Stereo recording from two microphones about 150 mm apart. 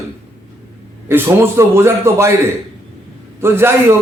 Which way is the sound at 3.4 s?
15° right (ahead or behind).